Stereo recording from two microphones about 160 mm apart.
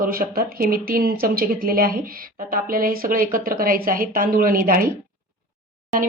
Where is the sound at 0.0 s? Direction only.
65° right (ahead or behind).